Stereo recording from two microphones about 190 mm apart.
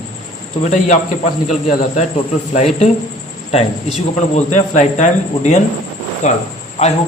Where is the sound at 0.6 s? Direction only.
40° left (ahead or behind).